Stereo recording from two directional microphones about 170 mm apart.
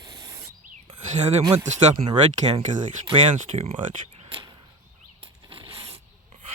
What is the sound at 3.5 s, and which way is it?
Speech, 35° right (ahead or behind).